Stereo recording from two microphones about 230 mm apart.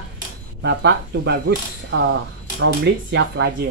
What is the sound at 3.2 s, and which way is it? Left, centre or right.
Speech, right.